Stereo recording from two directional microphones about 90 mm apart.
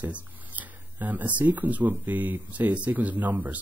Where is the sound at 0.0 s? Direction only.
20° right (ahead or behind).